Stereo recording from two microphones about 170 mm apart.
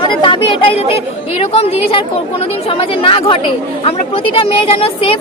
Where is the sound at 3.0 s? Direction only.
35° left (ahead or behind).